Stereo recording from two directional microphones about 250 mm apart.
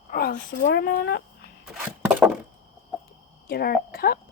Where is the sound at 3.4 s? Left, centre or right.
Left.